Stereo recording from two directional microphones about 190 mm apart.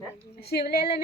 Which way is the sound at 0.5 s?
55° left (ahead or behind).